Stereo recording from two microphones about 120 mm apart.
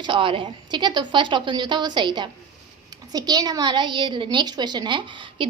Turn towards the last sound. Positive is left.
turn(degrees=-40)  # may be behind; listen again after turning